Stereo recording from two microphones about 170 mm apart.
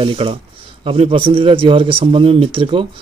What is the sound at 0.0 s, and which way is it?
A man's voice, 30° right (ahead or behind).